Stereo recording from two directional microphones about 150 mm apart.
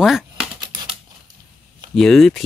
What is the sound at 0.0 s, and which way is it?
Typewriter, 5° right (ahead or behind).